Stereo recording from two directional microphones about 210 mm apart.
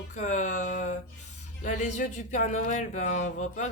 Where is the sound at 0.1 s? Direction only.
35° left (ahead or behind).